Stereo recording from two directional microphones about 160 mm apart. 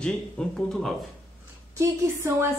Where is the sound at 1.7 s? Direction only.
15° right (ahead or behind).